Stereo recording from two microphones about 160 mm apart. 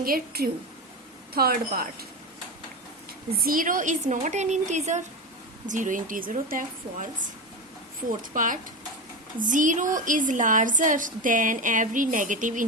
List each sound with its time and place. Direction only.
0.0 s a woman's voice: 65° right (ahead or behind)
3.4 s a woman's voice: 60° right (ahead or behind)
8.2 s a woman's voice: 55° right (ahead or behind)